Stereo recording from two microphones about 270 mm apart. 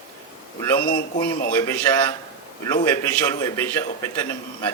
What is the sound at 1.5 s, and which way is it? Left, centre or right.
A man's voice, centre.